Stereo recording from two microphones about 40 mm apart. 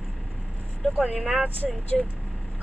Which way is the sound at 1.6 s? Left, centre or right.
Centre.